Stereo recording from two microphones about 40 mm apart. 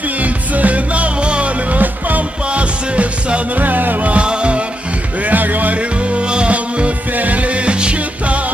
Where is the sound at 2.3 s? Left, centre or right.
Right.